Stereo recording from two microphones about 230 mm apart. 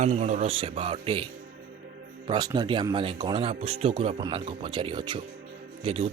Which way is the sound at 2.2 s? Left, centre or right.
Centre.